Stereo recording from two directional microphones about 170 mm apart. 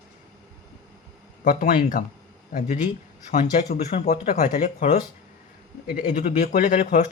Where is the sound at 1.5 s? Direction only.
50° left (ahead or behind).